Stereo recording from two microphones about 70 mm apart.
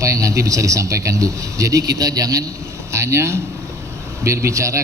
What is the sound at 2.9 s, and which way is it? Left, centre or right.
Speech, right.